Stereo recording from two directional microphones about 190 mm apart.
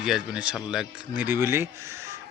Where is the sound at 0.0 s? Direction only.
5° right (ahead or behind).